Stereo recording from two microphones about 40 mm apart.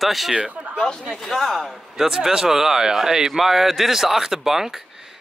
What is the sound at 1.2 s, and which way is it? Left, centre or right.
Speech, centre.